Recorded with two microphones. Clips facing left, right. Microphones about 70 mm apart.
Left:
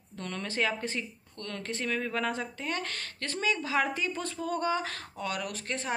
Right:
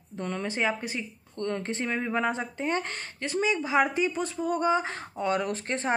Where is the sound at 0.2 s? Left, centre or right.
Centre.